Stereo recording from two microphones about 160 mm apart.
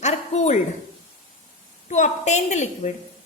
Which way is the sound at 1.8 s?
50° left (ahead or behind).